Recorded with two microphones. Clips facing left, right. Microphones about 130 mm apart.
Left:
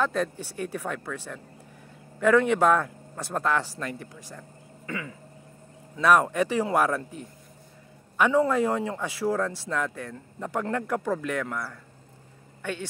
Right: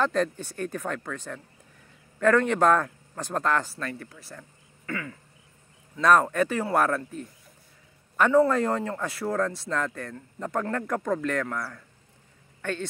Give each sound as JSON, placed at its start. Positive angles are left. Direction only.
{"t": 0.0, "sound": "a man's voice", "side_deg": 10}